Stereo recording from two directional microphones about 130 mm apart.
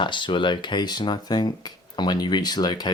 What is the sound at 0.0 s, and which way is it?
Speech, 40° left (ahead or behind).